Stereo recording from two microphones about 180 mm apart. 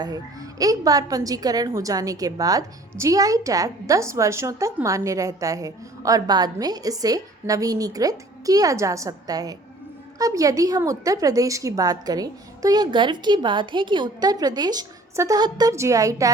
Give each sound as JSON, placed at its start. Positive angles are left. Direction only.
{"t": 0.6, "sound": "a woman's voice", "side_deg": -20}